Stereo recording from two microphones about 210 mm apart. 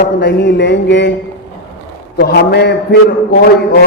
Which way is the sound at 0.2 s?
55° left (ahead or behind).